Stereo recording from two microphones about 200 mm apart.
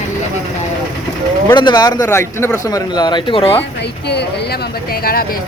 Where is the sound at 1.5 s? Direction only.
20° left (ahead or behind).